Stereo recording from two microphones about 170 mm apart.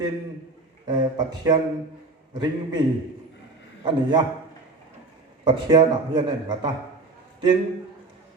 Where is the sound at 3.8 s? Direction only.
25° right (ahead or behind).